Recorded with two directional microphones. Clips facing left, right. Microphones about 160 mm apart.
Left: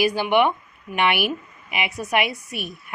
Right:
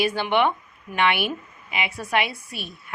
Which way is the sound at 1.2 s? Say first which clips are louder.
Left 2 dB; 25° right (ahead or behind).